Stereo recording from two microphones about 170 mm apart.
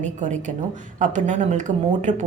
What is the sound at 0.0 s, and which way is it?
Speech, 45° right (ahead or behind).